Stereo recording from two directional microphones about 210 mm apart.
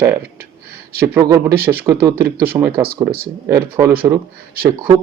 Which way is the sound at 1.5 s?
45° right (ahead or behind).